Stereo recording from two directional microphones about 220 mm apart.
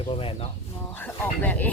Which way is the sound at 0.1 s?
25° left (ahead or behind).